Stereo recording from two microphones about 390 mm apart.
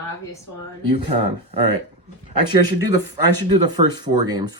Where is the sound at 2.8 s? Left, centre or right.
Centre.